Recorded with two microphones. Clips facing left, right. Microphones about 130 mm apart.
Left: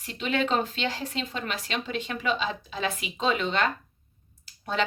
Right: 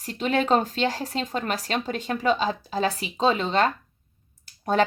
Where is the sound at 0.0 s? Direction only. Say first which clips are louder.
Right 3 dB; 40° right (ahead or behind).